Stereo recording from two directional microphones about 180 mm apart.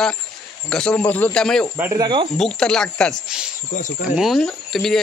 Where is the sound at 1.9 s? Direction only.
25° right (ahead or behind).